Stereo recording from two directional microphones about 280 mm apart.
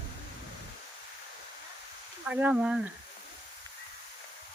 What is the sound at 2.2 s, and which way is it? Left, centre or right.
Speech, centre.